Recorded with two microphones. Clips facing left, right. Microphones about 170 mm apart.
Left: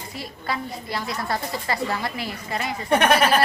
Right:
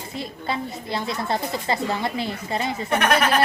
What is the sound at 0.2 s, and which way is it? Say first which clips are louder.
A woman's voice: right 2 dB; 25° right (ahead or behind).